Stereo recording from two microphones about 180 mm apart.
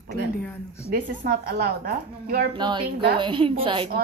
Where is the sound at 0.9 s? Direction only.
55° right (ahead or behind).